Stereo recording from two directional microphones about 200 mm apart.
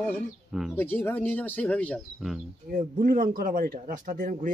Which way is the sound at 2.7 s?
45° right (ahead or behind).